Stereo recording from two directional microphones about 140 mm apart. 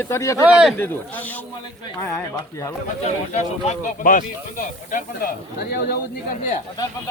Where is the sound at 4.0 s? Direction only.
75° left (ahead or behind).